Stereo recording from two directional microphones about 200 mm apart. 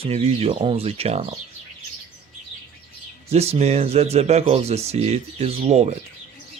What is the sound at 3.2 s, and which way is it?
Speech, 30° right (ahead or behind).